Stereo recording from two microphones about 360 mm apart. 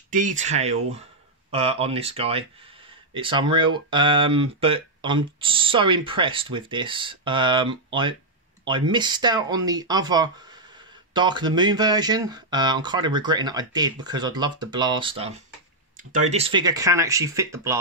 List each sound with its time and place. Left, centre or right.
0.1 s speech: right